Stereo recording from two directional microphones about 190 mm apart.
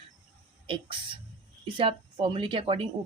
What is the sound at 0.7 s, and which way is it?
Speech, 30° right (ahead or behind).